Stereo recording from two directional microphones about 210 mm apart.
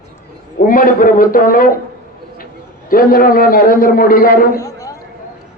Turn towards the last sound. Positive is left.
turn(degrees=15)  # may be behind; listen again after turning